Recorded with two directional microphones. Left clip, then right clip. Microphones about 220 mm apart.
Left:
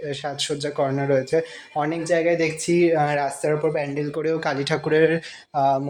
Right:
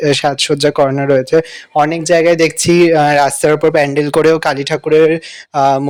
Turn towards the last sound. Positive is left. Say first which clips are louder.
# right 9 dB
turn(degrees=-35)  # may be behind; listen again after turning